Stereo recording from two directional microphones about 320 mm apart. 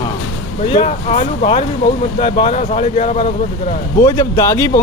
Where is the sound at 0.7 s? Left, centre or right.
Left.